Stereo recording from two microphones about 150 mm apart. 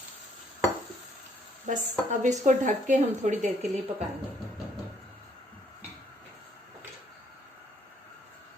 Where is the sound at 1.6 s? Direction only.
60° right (ahead or behind).